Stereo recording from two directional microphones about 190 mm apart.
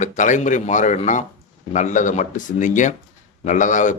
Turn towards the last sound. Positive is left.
turn(degrees=40)  # may be behind; listen again after turning